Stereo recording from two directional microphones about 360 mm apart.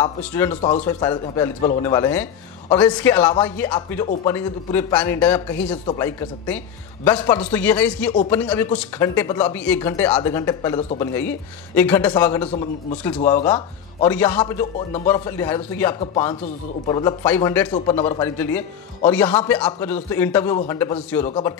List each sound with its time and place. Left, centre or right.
0.2 s a man's voice: centre
0.6 s a man's voice: centre
14.0 s a man's voice: centre